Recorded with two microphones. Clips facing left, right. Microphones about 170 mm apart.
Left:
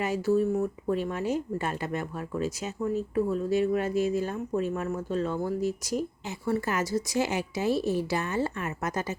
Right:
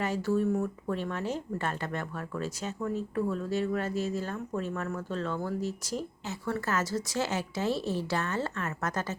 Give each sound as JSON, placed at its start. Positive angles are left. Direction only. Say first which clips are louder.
{"t": 0.0, "sound": "speech", "louder": "left 3 dB", "side_deg": 10}